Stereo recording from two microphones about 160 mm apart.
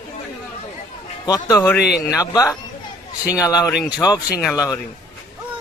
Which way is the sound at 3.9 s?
20° left (ahead or behind).